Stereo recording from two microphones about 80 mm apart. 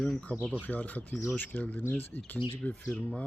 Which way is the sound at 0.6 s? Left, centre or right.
Centre.